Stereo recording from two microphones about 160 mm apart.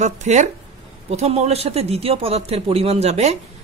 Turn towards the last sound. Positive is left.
turn(degrees=-40)  # may be behind; listen again after turning